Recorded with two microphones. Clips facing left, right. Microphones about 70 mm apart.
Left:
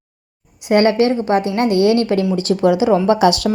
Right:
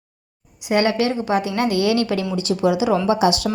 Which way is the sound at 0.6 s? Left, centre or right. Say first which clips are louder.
Left 5 dB; left.